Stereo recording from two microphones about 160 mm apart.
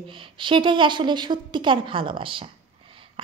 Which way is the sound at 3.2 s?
35° right (ahead or behind).